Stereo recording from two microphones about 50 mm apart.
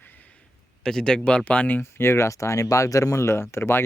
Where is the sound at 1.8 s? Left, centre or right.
Left.